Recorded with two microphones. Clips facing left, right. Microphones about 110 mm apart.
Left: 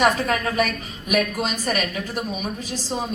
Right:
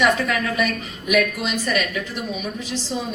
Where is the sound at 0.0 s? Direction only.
40° left (ahead or behind).